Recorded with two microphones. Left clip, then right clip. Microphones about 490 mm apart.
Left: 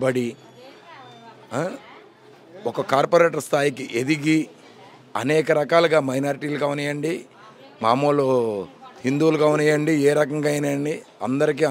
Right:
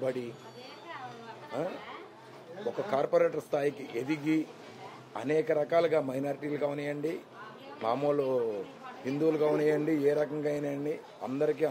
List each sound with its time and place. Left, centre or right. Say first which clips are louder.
0.0 s a man's voice: left 11 dB; left
2.9 s a man's voice: left 10 dB; left